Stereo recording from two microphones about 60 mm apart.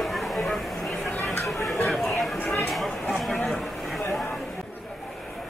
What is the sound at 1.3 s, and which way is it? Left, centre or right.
Chatter, left.